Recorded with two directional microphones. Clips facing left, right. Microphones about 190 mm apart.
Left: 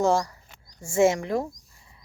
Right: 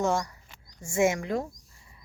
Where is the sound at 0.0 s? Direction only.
30° left (ahead or behind).